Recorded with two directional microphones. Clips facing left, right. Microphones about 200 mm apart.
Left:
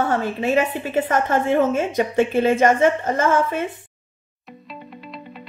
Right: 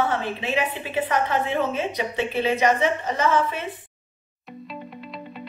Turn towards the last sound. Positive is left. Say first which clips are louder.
# left 3 dB
turn(degrees=50)  # may be behind; listen again after turning